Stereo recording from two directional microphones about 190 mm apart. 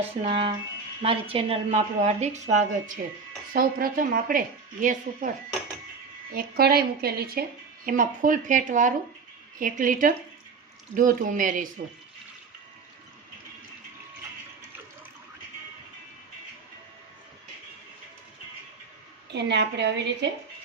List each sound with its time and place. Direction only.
0.2 s a woman's voice: 30° right (ahead or behind); by 5.3 s 45° right (ahead or behind)
6.3 s a woman's voice: 55° right (ahead or behind)
19.3 s a woman's voice: 65° right (ahead or behind)